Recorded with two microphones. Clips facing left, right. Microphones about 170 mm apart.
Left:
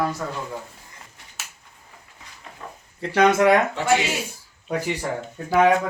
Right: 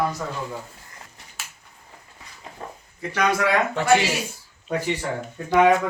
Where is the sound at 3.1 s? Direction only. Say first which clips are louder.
Left 5 dB; 25° left (ahead or behind).